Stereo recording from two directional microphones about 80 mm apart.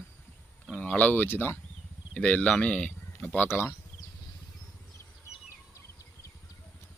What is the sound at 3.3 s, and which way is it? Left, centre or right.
Speech, left.